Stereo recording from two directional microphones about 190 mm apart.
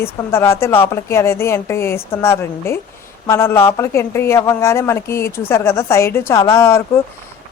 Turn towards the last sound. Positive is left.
turn(degrees=15)  # may be behind; listen again after turning